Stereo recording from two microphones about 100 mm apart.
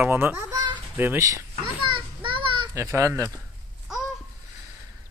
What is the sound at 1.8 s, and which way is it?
Children playing, 55° right (ahead or behind).